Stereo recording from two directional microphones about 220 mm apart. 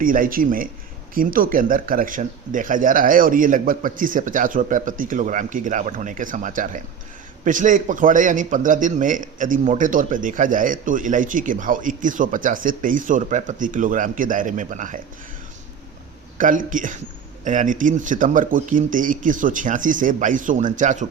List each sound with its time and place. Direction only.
0.0 s a man's voice: 40° right (ahead or behind)
16.4 s a man's voice: 35° right (ahead or behind)